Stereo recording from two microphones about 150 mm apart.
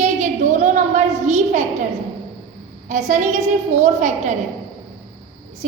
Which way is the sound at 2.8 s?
55° right (ahead or behind).